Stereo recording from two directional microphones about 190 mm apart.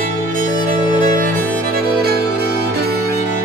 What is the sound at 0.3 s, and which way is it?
Music, 45° right (ahead or behind).